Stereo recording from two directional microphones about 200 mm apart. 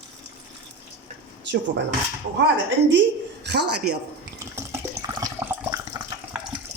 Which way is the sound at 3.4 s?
55° right (ahead or behind).